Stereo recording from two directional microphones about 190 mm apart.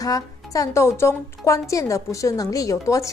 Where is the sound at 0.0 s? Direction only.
20° left (ahead or behind).